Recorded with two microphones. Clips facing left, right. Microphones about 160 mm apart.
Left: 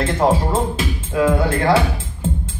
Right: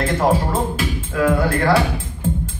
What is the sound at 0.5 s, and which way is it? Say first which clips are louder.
Speech: left 1 dB; 25° left (ahead or behind).